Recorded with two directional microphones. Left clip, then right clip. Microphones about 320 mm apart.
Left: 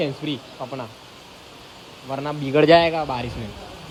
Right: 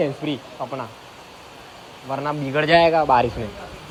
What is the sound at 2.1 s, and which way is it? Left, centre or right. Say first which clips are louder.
Speech: right 2 dB; centre.